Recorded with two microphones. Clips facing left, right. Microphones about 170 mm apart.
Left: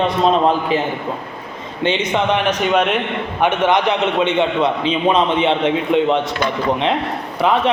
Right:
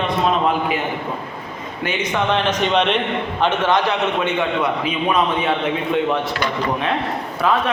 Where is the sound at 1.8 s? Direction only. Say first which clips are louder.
Left 3 dB; 25° left (ahead or behind).